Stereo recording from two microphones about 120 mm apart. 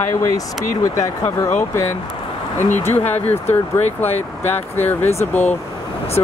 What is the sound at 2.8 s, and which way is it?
Speech, 15° left (ahead or behind).